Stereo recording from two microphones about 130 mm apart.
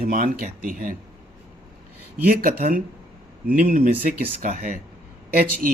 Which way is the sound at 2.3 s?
90° right.